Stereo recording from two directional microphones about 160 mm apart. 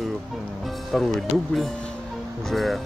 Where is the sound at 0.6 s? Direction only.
Centre (ahead or behind).